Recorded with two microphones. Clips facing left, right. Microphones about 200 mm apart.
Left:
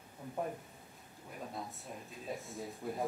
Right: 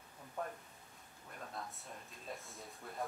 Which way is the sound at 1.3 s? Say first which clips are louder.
Left 4 dB; 5° left (ahead or behind).